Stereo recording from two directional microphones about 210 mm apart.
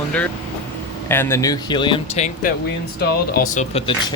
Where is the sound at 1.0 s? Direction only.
10° left (ahead or behind).